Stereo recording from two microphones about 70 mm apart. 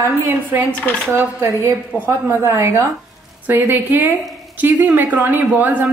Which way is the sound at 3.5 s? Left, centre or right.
Right.